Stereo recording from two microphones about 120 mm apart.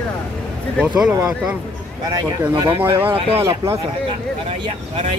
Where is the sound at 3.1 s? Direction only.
50° right (ahead or behind).